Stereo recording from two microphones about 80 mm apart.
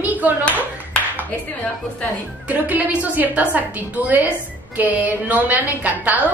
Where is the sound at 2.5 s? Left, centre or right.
Centre.